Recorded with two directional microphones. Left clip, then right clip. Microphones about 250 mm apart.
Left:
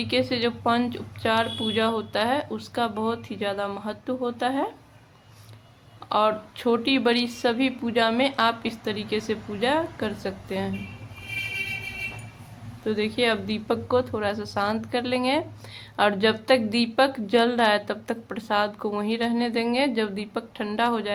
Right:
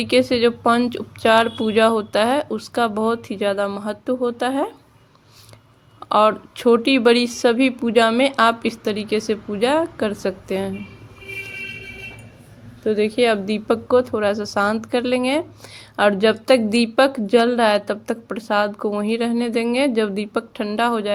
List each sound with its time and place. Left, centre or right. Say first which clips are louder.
0.0 s speech: right 8 dB; right
6.0 s speech: right 7 dB; right
12.8 s speech: right 7 dB; centre